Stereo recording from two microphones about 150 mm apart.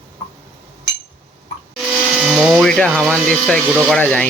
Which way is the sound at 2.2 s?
5° right (ahead or behind).